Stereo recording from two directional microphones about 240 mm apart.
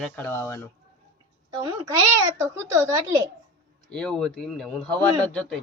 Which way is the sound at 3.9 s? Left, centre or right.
Centre.